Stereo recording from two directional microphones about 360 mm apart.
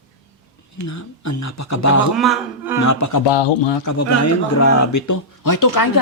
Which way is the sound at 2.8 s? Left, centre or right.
Left.